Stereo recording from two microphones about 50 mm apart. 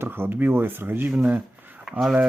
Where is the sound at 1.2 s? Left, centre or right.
Right.